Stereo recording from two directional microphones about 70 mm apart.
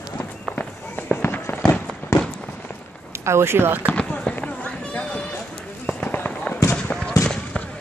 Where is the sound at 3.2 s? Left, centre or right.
Right.